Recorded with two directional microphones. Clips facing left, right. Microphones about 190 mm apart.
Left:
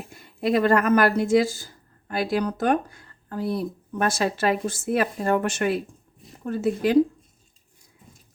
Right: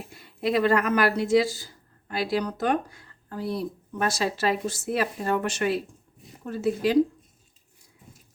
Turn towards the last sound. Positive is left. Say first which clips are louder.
# left 2 dB
turn(degrees=50)  # may be behind; listen again after turning